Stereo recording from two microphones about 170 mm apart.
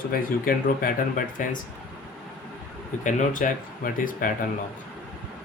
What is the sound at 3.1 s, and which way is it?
Speech, 50° left (ahead or behind).